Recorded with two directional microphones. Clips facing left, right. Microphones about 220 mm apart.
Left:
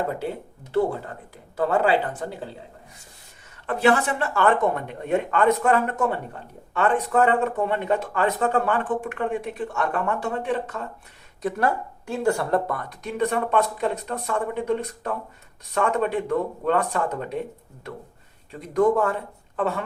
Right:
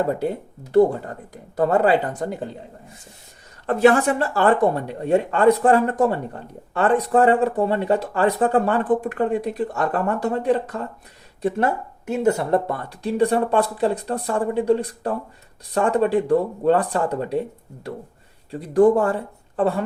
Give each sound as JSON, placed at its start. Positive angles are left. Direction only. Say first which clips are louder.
{"t": 1.5, "sound": "speech", "louder": "right 3 dB", "side_deg": -40}
{"t": 3.7, "sound": "speech", "louder": "right 5 dB", "side_deg": -45}
{"t": 11.4, "sound": "speech", "louder": "right 3 dB", "side_deg": -25}
{"t": 18.6, "sound": "speech", "louder": "right 4 dB", "side_deg": -30}